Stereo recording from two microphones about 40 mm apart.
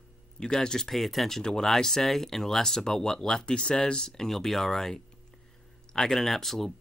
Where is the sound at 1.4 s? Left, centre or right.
Centre.